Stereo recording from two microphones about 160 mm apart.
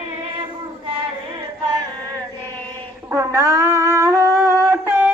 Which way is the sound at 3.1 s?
20° right (ahead or behind).